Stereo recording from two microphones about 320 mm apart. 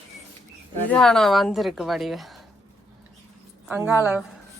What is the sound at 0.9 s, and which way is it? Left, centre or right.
A woman's voice, centre.